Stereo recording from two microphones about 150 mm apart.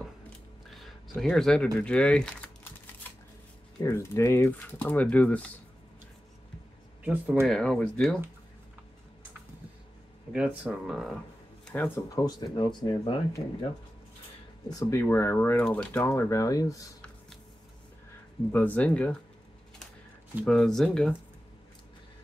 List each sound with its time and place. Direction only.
0.7 s a sound: centre (ahead or behind)
3.8 s speech: 20° left (ahead or behind)
7.0 s speech: 10° right (ahead or behind)
7.4 s speech: 5° left (ahead or behind)
10.3 s speech: 5° right (ahead or behind)
11.6 s speech: 10° left (ahead or behind)
12.3 s speech: 30° left (ahead or behind)
14.7 s speech: 20° left (ahead or behind)
16.0 s speech: 20° left (ahead or behind)
18.5 s speech: 10° left (ahead or behind)
20.4 s speech: 5° left (ahead or behind)